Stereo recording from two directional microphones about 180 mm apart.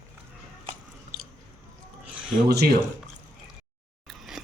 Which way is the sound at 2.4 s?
60° right (ahead or behind).